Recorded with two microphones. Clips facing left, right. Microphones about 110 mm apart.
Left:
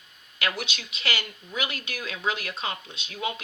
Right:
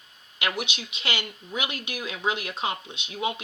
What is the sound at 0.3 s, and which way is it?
Speech, 20° right (ahead or behind).